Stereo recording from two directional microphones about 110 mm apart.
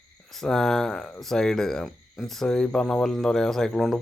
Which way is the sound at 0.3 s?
5° left (ahead or behind).